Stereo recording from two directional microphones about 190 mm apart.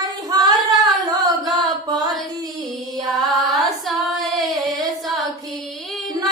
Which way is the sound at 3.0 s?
Centre (ahead or behind).